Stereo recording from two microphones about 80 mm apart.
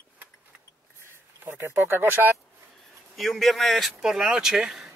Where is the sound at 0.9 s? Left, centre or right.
Right.